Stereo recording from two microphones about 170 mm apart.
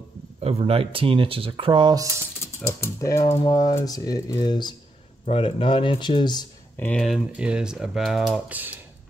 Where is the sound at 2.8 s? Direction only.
15° left (ahead or behind).